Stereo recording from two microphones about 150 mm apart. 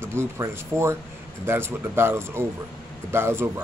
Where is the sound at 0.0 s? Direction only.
15° right (ahead or behind).